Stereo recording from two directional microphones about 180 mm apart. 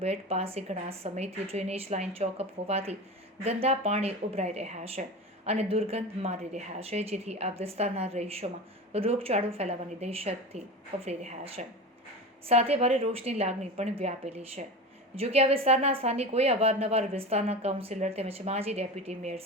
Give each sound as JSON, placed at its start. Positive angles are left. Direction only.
{"t": 0.0, "sound": "a woman's voice", "side_deg": -35}